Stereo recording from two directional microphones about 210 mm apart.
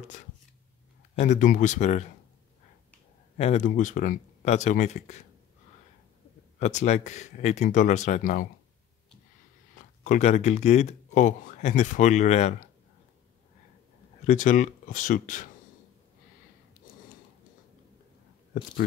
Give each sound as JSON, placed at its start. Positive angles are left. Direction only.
{"t": 1.1, "sound": "speech", "side_deg": 35}
{"t": 3.3, "sound": "speech", "side_deg": 30}
{"t": 6.6, "sound": "speech", "side_deg": 35}
{"t": 9.8, "sound": "speech", "side_deg": 35}
{"t": 14.2, "sound": "speech", "side_deg": 35}